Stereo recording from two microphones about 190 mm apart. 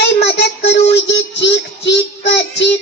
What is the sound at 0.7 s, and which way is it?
A child's voice, 65° left (ahead or behind).